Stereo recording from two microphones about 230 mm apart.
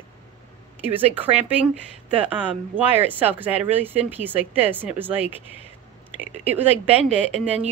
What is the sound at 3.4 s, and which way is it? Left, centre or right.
Speech, centre.